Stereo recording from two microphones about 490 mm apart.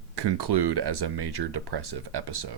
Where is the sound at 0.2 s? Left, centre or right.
Right.